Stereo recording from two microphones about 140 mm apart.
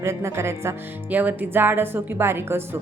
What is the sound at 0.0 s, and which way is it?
A woman's voice, 20° right (ahead or behind).